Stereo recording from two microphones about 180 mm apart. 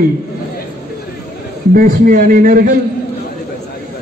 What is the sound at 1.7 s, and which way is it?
A man's voice, 50° right (ahead or behind).